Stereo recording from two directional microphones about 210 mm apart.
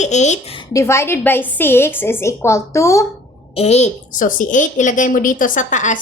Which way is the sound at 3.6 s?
30° left (ahead or behind).